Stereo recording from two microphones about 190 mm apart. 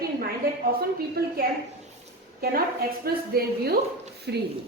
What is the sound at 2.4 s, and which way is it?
A woman's voice, 55° right (ahead or behind).